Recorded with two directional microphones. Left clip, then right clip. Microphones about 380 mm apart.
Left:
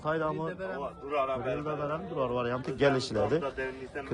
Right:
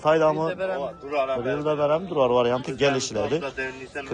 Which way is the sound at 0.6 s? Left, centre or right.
Right.